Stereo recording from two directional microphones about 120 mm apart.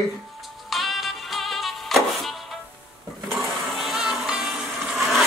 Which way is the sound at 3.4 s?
Centre (ahead or behind).